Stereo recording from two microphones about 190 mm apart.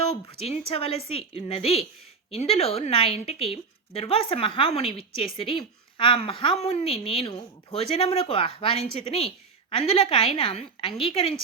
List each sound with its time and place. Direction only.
0.7 s a woman's voice: 30° left (ahead or behind)